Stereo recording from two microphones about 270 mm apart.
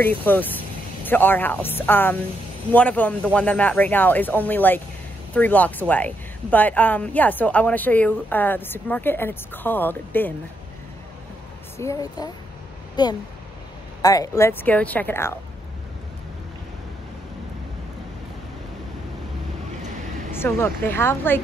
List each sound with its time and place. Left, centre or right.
0.0 s a woman's voice: centre
11.8 s a woman's voice: centre
20.3 s a woman's voice: centre